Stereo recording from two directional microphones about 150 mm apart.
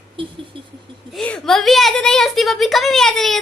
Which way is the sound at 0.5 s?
35° right (ahead or behind).